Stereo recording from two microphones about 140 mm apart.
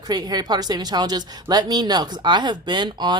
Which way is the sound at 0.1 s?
30° right (ahead or behind).